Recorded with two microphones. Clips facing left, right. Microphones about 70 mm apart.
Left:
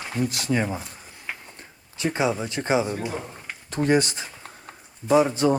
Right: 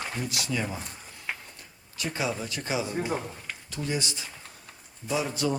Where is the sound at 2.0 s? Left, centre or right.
Left.